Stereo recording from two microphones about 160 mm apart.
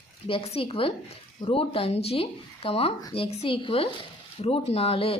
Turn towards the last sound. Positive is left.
turn(degrees=40)  # may be behind; listen again after turning